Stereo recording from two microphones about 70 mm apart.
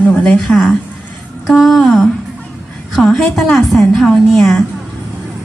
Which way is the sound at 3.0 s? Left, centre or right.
Centre.